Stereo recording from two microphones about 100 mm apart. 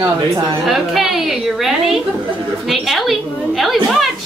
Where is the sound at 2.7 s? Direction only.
Centre (ahead or behind).